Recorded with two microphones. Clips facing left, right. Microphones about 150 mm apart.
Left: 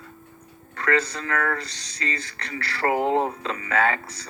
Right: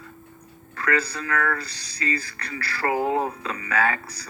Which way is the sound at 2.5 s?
30° left (ahead or behind).